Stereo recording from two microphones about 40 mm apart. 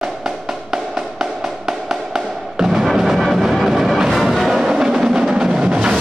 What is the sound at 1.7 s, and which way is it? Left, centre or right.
Music, centre.